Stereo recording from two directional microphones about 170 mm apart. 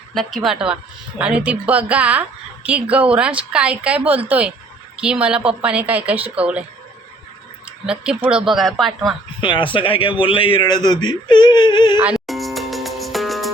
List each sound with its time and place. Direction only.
0.1 s a woman's voice: centre (ahead or behind)
7.9 s speech: 5° right (ahead or behind)
9.4 s a man's voice: 30° left (ahead or behind)
12.1 s music: centre (ahead or behind)